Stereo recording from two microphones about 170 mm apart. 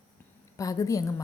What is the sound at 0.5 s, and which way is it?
Speech, 20° left (ahead or behind).